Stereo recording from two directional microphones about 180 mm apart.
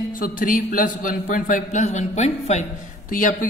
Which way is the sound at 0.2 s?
50° left (ahead or behind).